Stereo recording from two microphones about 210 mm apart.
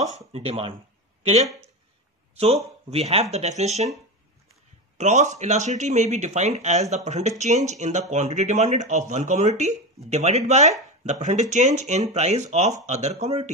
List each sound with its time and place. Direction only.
0.3 s speech: 30° right (ahead or behind)
4.9 s speech: 35° right (ahead or behind)